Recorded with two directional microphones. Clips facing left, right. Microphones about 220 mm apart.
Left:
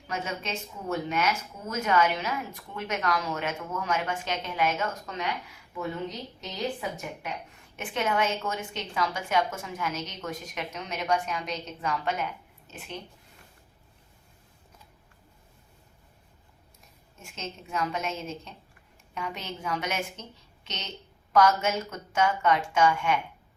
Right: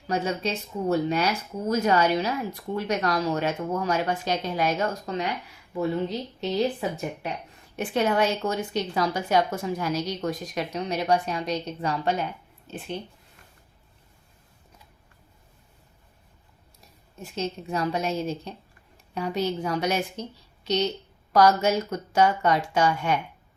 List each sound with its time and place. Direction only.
0.1 s speech: 35° right (ahead or behind)
17.2 s speech: 35° right (ahead or behind)